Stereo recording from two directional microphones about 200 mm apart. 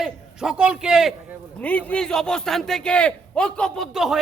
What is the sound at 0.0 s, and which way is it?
A man's voice, 5° right (ahead or behind).